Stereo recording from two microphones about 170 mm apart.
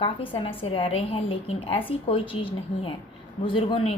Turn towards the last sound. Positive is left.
turn(degrees=30)  # may be behind; listen again after turning